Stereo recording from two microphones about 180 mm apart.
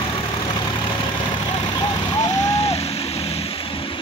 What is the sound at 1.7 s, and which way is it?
Vehicle, 20° left (ahead or behind).